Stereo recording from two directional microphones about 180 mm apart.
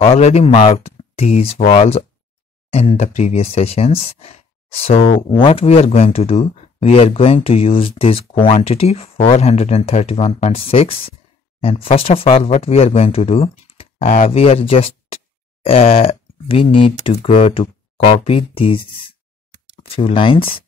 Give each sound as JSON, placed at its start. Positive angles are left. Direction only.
{"t": 0.0, "sound": "speech", "side_deg": 35}
{"t": 19.8, "sound": "speech", "side_deg": 30}